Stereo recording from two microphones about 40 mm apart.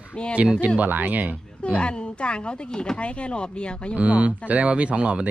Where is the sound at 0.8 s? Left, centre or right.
Right.